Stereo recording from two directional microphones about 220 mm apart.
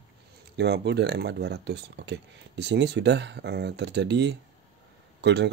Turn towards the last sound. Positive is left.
turn(degrees=-50)  # may be behind; listen again after turning